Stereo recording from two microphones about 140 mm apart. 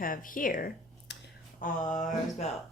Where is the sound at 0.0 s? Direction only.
80° left.